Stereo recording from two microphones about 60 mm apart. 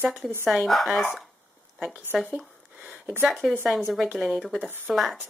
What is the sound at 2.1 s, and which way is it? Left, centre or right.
Speech, centre.